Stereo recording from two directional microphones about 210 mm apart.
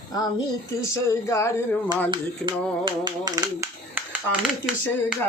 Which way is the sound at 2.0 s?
20° right (ahead or behind).